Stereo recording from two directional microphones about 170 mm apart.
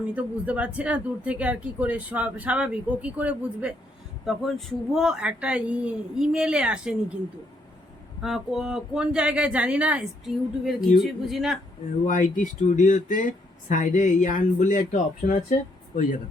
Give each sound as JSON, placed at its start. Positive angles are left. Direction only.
{"t": 0.0, "sound": "speech", "side_deg": -10}
{"t": 8.2, "sound": "speech", "side_deg": 0}
{"t": 12.0, "sound": "speech", "side_deg": 50}